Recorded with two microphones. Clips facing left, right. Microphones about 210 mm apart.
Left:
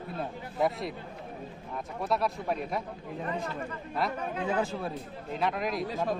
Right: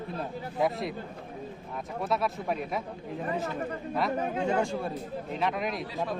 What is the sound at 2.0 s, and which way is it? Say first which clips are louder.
Speech: even; centre (ahead or behind).